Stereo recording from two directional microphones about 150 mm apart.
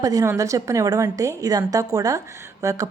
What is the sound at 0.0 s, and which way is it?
A woman's voice, 25° right (ahead or behind).